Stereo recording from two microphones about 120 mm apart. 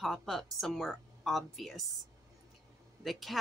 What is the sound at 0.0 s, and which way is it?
A woman's voice, centre (ahead or behind).